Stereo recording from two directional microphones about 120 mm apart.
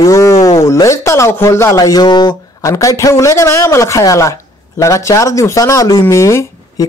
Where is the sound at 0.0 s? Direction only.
25° left (ahead or behind).